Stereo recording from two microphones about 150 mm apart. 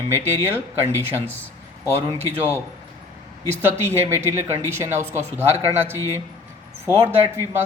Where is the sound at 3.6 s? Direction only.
15° right (ahead or behind).